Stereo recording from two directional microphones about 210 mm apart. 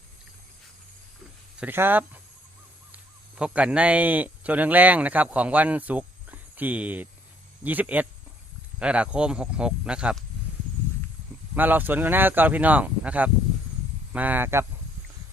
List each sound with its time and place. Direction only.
1.5 s speech: 10° right (ahead or behind)
11.5 s speech: 10° right (ahead or behind)